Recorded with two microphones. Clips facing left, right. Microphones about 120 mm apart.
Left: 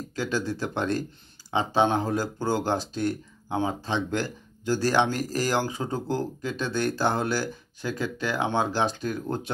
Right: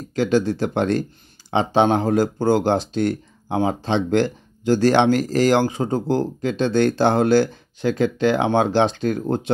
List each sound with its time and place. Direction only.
0.1 s speech: 65° right (ahead or behind)
6.6 s speech: 75° right (ahead or behind)